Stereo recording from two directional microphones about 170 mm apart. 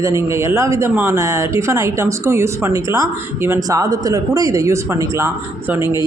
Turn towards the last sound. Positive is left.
turn(degrees=-15)  # may be behind; listen again after turning